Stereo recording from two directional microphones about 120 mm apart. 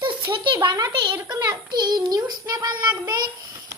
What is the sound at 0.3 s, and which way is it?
Speech, 40° right (ahead or behind).